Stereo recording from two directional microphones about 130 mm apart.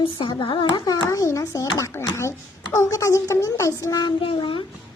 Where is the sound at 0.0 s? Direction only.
40° left (ahead or behind).